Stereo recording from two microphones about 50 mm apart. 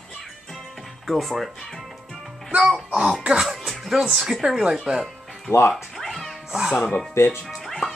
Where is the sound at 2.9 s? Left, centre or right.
Centre.